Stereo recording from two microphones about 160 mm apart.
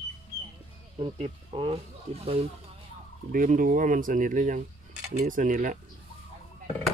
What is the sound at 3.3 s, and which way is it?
Speech, 55° right (ahead or behind).